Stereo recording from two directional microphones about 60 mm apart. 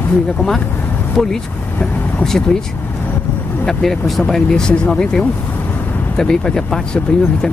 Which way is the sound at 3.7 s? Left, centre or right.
Centre.